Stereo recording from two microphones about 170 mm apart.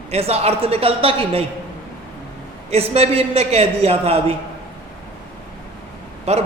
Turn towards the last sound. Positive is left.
turn(degrees=-40)  # may be behind; listen again after turning